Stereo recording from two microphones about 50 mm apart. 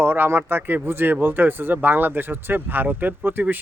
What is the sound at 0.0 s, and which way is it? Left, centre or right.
A man's voice, right.